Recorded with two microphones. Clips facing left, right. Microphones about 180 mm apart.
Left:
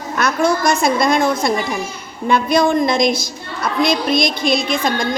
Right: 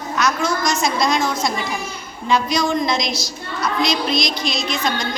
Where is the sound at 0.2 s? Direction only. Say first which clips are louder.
Left 4 dB; 55° left (ahead or behind).